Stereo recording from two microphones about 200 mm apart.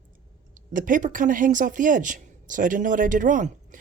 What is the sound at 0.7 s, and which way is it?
Speech, 40° right (ahead or behind).